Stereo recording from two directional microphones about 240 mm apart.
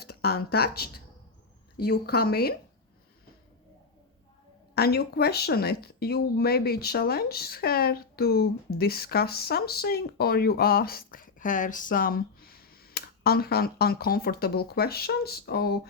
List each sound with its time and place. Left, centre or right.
0.0 s speech: left
4.7 s speech: left